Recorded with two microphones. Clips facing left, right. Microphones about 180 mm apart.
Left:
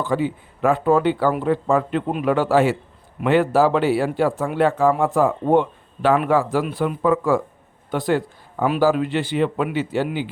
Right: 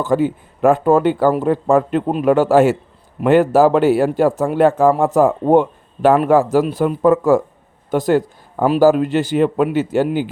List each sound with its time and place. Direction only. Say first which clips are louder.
0.0 s a man's voice: right 5 dB; 45° right (ahead or behind)